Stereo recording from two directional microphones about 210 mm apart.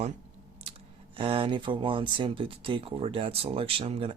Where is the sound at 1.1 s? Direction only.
25° right (ahead or behind).